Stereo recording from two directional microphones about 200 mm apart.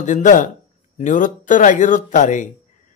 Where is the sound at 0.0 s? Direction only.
40° left (ahead or behind).